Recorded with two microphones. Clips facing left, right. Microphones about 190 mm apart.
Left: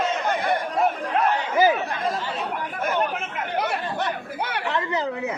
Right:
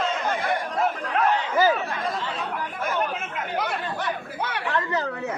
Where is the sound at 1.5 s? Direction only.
15° left (ahead or behind).